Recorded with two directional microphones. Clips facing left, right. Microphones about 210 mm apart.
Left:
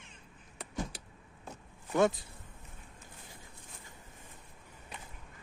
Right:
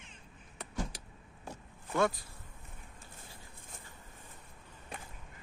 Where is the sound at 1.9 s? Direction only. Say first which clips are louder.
Left 3 dB; 20° left (ahead or behind).